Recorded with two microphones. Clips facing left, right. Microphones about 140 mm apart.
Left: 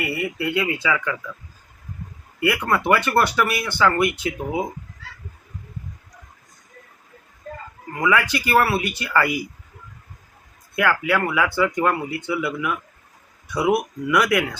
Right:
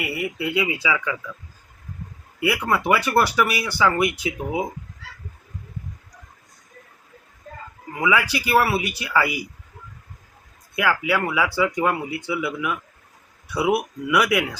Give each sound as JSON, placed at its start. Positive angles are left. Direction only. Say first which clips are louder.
{"t": 0.0, "sound": "speech", "louder": "left 1 dB", "side_deg": -10}
{"t": 2.4, "sound": "speech", "louder": "left 1 dB", "side_deg": -10}
{"t": 7.9, "sound": "speech", "louder": "left 1 dB", "side_deg": -10}
{"t": 10.8, "sound": "speech", "louder": "left 1 dB", "side_deg": -5}